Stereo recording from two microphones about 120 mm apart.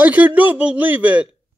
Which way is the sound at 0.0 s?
15° right (ahead or behind).